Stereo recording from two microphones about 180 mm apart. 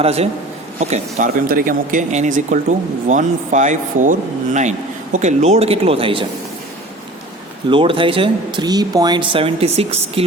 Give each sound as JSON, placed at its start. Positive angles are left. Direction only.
{"t": 0.0, "sound": "speech", "side_deg": -35}
{"t": 7.7, "sound": "speech", "side_deg": -30}